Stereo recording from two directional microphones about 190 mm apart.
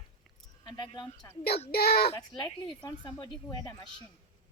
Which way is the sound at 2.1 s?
20° left (ahead or behind).